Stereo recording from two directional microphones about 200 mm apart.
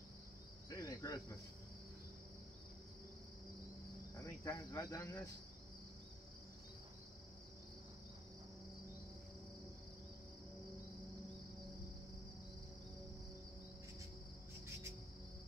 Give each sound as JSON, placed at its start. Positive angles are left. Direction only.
{"t": 0.7, "sound": "cricket", "side_deg": 15}
{"t": 4.1, "sound": "cricket", "side_deg": 15}